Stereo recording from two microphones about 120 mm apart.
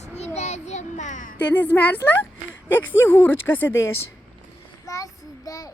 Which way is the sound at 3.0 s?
20° left (ahead or behind).